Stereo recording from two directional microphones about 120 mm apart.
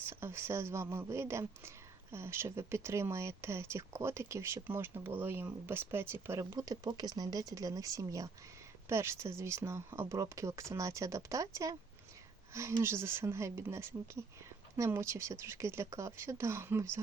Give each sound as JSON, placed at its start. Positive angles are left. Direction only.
{"t": 0.0, "sound": "speech", "side_deg": -20}
{"t": 6.4, "sound": "speech", "side_deg": -30}